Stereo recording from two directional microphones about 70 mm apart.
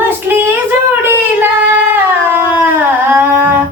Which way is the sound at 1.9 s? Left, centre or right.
Right.